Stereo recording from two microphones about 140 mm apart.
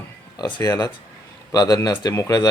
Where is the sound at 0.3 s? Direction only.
30° left (ahead or behind).